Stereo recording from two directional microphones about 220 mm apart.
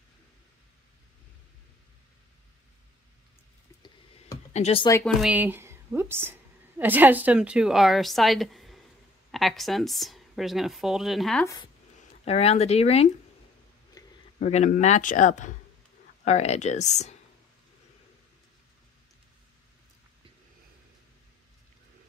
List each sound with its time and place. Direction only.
4.6 s speech: 30° left (ahead or behind)
5.0 s a woman's voice: 5° right (ahead or behind)
11.4 s speech: 15° left (ahead or behind)
12.0 s speech: 30° left (ahead or behind)
14.0 s a sound: 15° left (ahead or behind)
14.4 s a man's voice: 30° left (ahead or behind)